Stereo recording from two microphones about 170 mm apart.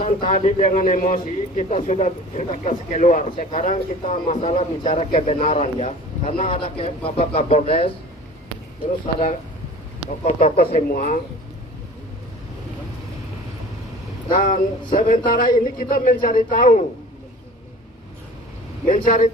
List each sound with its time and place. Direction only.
0.0 s a man's voice: 35° left (ahead or behind)
3.3 s a man's voice: 35° left (ahead or behind)
4.1 s a man's voice: 45° left (ahead or behind)
6.5 s a man's voice: 35° left (ahead or behind)
10.1 s a man's voice: 50° left (ahead or behind)
14.3 s a man's voice: 50° left (ahead or behind)
18.9 s a man's voice: 55° left (ahead or behind)